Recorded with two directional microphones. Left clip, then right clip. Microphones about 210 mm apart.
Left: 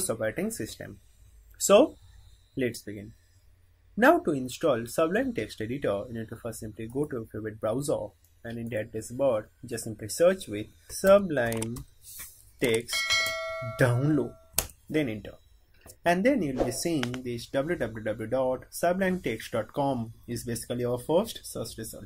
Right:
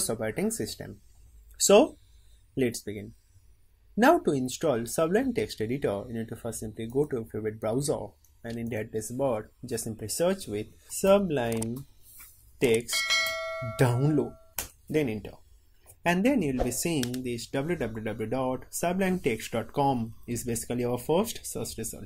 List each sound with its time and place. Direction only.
0.0 s speech: 25° right (ahead or behind)
2.5 s speech: 25° right (ahead or behind)
4.0 s speech: 25° right (ahead or behind)
12.7 s bell: centre (ahead or behind)
14.9 s speech: 25° right (ahead or behind)